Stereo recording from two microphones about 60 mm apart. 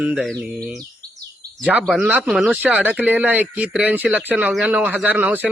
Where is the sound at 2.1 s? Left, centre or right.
Centre.